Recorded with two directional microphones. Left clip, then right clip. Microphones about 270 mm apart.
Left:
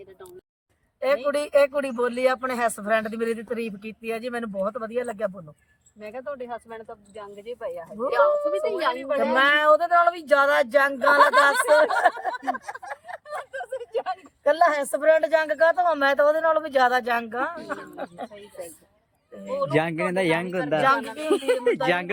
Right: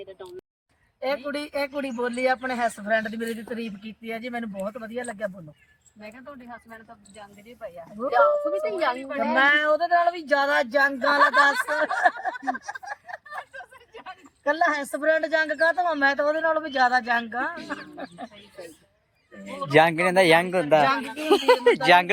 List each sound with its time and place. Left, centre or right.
1.0 s speech: centre
6.0 s speech: left
7.9 s speech: centre
19.5 s speech: centre